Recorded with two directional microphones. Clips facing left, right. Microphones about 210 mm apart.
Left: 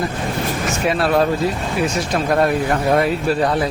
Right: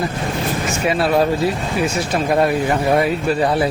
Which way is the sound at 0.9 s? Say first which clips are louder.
Even; centre (ahead or behind).